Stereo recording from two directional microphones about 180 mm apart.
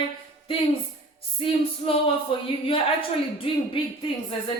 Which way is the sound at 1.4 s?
30° left (ahead or behind).